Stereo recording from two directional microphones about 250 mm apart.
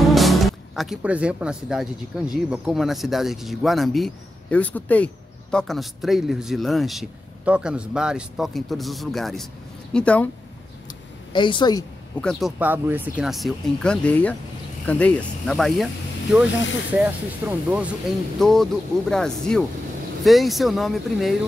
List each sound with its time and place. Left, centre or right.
0.0 s speech: centre
11.3 s a woman's voice: centre
12.2 s speech: centre